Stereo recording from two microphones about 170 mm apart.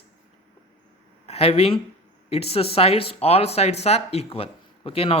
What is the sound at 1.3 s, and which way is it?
Speech, 35° left (ahead or behind).